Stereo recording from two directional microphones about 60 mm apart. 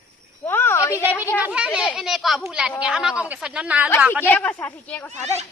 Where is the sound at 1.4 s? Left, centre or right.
Centre.